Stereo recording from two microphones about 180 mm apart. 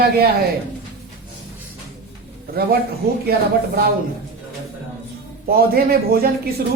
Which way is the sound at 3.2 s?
60° right (ahead or behind).